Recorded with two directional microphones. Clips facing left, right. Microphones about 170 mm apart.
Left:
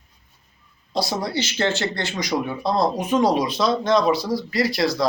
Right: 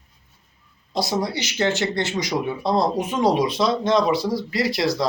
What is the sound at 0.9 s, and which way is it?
Speech, 20° right (ahead or behind).